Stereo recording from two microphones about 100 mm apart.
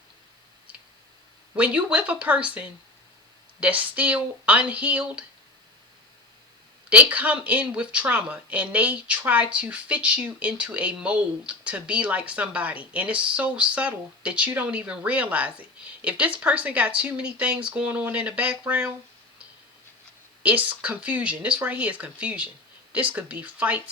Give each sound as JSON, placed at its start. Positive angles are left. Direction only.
{"t": 1.5, "sound": "speech", "side_deg": -15}
{"t": 6.9, "sound": "speech", "side_deg": -15}
{"t": 20.4, "sound": "speech", "side_deg": -15}